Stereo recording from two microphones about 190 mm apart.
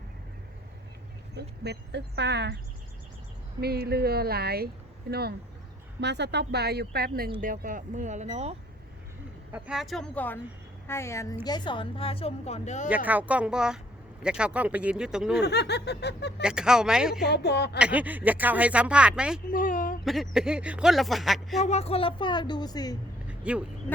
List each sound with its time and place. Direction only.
1.4 s speech: 60° right (ahead or behind)
3.6 s speech: 55° right (ahead or behind)
6.0 s speech: 65° right (ahead or behind); by 8.5 s 35° right (ahead or behind)
9.5 s a woman's voice: 5° right (ahead or behind); by 12.9 s 40° left (ahead or behind)
12.9 s speech: 10° right (ahead or behind)
15.4 s snicker: 60° left (ahead or behind)
16.4 s speech: 5° right (ahead or behind)
17.2 s snicker: 60° left (ahead or behind)
17.7 s speech: 5° right (ahead or behind)
19.5 s speech: 45° left (ahead or behind)
20.1 s speech: centre (ahead or behind)
21.6 s a woman's voice: 35° left (ahead or behind)
23.4 s speech: 5° right (ahead or behind)